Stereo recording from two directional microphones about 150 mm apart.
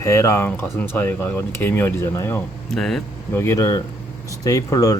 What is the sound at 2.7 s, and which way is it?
Speech, 5° left (ahead or behind).